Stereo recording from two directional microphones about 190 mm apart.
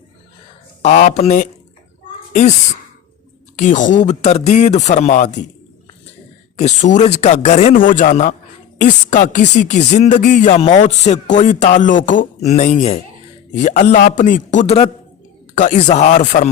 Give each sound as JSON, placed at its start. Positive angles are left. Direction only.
{"t": 0.8, "sound": "speech", "side_deg": 40}
{"t": 3.5, "sound": "speech", "side_deg": 40}
{"t": 6.6, "sound": "speech", "side_deg": 40}